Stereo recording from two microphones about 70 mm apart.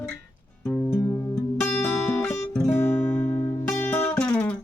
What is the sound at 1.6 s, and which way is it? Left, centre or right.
Music, left.